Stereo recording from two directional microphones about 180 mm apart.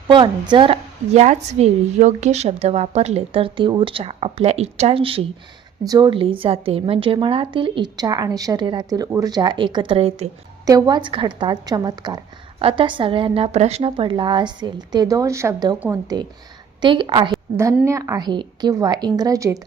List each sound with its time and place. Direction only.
0.1 s a woman's voice: 25° right (ahead or behind)
5.8 s a woman's voice: 20° right (ahead or behind)
10.7 s a woman's voice: 20° right (ahead or behind)